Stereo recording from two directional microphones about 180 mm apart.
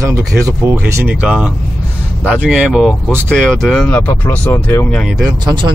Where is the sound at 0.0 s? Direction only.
20° right (ahead or behind); by 5.0 s 10° left (ahead or behind).